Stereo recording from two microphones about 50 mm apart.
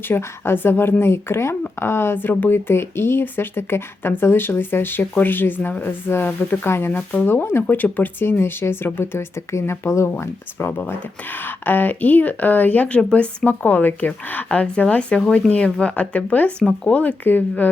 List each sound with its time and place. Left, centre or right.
0.1 s speech: left
6.7 s speech: left
10.7 s speech: left